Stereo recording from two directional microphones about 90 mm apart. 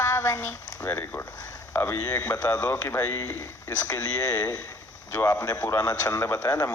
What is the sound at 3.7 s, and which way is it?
Speech, 40° left (ahead or behind).